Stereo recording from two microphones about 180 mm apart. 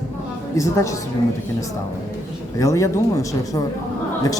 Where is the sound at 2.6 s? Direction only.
15° left (ahead or behind).